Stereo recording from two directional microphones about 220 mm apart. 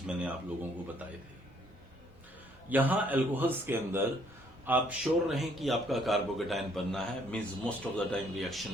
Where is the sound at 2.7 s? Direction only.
5° right (ahead or behind).